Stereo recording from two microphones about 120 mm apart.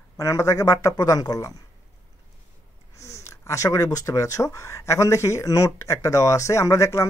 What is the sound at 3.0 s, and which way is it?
Speech, 25° left (ahead or behind).